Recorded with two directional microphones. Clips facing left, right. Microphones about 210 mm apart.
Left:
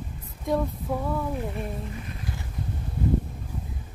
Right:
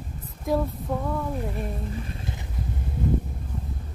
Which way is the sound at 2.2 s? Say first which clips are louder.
Even; 25° right (ahead or behind).